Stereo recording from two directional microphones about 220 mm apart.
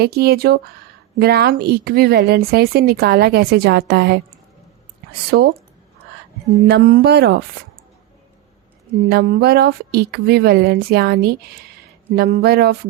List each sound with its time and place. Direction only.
0.0 s speech: 45° right (ahead or behind)
6.7 s speech: 45° right (ahead or behind)
9.0 s speech: 45° right (ahead or behind)